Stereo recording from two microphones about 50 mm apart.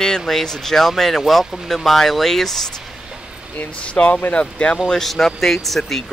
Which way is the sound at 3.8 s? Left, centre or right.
Left.